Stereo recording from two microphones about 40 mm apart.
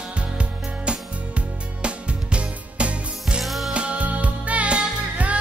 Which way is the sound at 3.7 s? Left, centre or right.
Right.